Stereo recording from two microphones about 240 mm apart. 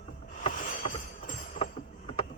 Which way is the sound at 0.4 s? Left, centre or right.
Left.